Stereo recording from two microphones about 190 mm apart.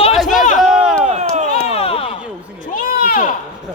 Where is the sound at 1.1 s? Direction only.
40° right (ahead or behind).